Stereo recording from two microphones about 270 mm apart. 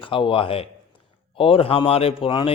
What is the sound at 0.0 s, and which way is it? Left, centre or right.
A man's voice, centre.